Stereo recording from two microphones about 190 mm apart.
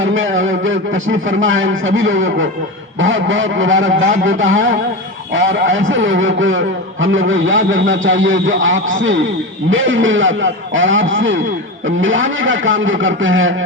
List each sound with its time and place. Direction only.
0.0 s a man's voice: 90° right